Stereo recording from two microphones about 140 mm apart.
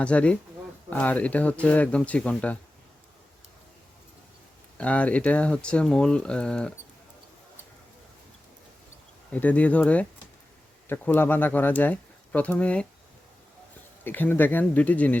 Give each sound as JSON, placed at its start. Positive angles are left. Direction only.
{"t": 0.0, "sound": "speech", "side_deg": 10}
{"t": 4.8, "sound": "speech", "side_deg": 10}
{"t": 9.3, "sound": "speech", "side_deg": 10}
{"t": 14.0, "sound": "speech", "side_deg": 15}